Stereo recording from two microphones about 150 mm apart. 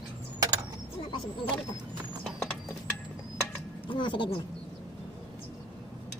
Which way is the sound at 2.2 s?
Centre (ahead or behind).